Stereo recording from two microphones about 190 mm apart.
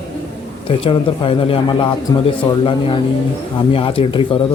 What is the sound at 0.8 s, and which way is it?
Speech, 30° left (ahead or behind).